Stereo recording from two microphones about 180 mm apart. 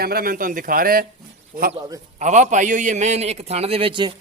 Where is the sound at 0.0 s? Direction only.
55° right (ahead or behind).